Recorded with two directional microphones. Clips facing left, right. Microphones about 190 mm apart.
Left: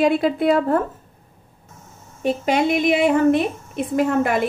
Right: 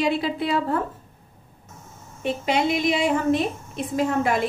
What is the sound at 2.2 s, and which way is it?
A woman's voice, 50° left (ahead or behind).